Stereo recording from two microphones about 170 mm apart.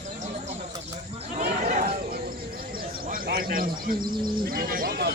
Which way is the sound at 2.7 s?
60° right (ahead or behind).